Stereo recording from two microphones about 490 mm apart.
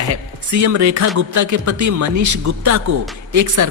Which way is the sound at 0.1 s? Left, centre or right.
Right.